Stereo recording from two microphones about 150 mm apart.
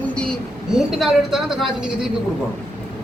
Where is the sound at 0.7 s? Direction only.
5° right (ahead or behind).